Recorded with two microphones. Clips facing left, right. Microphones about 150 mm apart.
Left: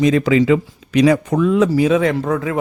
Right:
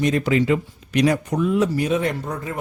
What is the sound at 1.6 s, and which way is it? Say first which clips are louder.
Speech: left 7 dB; 90° left.